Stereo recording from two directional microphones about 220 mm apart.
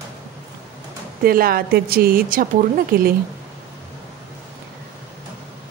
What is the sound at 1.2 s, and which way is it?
A woman's voice, 40° right (ahead or behind).